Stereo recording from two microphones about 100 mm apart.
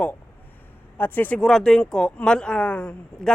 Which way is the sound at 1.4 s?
5° left (ahead or behind).